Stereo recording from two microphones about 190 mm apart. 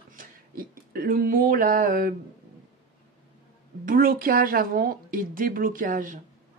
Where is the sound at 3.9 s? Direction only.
50° right (ahead or behind).